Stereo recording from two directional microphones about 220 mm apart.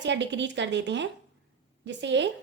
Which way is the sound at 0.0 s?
55° right (ahead or behind).